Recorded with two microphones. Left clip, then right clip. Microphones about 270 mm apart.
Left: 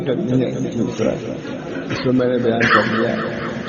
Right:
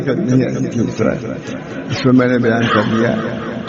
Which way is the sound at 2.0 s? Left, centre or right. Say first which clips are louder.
Right 4 dB; right.